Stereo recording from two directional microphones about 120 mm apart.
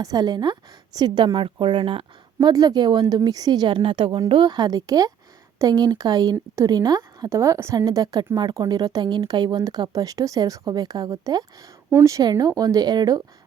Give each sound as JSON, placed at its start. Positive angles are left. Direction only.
{"t": 0.0, "sound": "a woman's voice", "side_deg": -35}
{"t": 2.4, "sound": "a woman's voice", "side_deg": -30}